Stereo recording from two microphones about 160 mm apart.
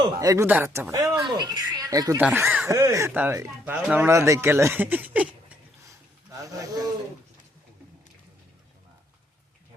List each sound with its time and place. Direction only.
0.2 s speech: 20° right (ahead or behind)
2.2 s speech: 10° right (ahead or behind)
6.4 s speech: 20° right (ahead or behind)